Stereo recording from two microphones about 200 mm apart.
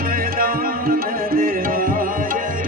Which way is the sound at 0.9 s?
45° right (ahead or behind).